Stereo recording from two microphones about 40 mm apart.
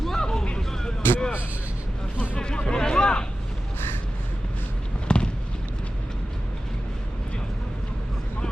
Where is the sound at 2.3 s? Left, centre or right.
Left.